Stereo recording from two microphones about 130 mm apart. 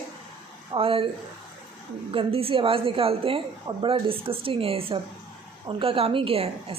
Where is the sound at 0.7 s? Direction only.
45° right (ahead or behind).